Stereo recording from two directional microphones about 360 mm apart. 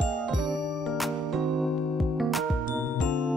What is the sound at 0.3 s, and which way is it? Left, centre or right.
Music, centre.